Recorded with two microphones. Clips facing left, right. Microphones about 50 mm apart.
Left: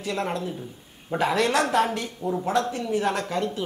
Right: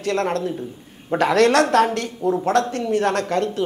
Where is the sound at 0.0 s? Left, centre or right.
Right.